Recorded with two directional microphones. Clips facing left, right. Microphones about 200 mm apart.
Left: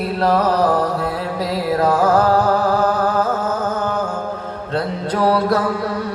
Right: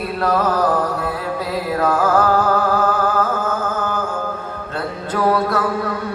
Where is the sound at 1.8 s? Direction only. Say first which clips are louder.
Left 1 dB; 35° left (ahead or behind).